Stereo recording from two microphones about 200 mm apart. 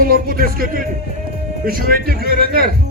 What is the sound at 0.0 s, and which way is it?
A man's voice, 45° right (ahead or behind).